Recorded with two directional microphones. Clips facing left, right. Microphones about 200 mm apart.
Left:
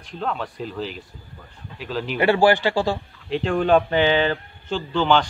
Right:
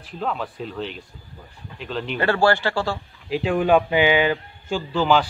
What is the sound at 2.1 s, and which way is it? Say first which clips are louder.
Speech: left 3 dB; 15° left (ahead or behind).